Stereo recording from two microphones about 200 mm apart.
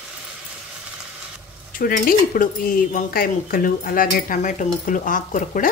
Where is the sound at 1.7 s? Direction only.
45° left (ahead or behind).